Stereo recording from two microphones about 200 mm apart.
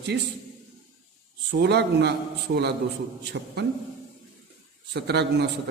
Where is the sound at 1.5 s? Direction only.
55° right (ahead or behind).